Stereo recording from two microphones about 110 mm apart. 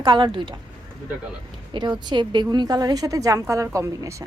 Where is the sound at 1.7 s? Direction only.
40° right (ahead or behind).